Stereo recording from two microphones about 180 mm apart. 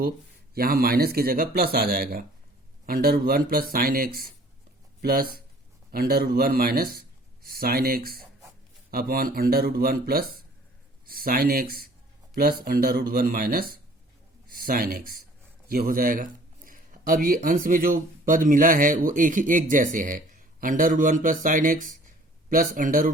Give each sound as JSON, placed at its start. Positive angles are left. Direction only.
{"t": 0.5, "sound": "speech", "side_deg": -55}